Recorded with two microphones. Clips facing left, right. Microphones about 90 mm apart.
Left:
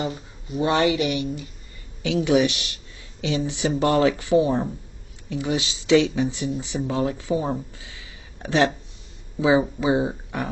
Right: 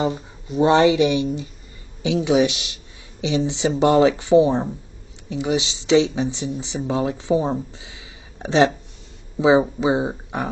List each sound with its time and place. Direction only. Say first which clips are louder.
0.0 s speech: right 6 dB; 25° right (ahead or behind)